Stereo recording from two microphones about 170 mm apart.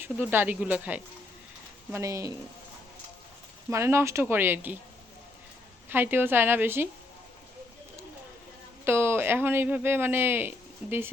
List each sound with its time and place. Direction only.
0.0 s speech: 10° right (ahead or behind)
3.7 s speech: 15° right (ahead or behind)
5.9 s speech: 10° right (ahead or behind)
8.8 s speech: 15° right (ahead or behind)